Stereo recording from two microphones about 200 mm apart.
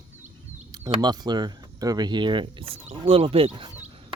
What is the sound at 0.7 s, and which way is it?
Speech, 20° right (ahead or behind).